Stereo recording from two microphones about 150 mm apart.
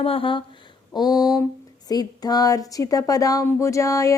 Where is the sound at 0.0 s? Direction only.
35° left (ahead or behind).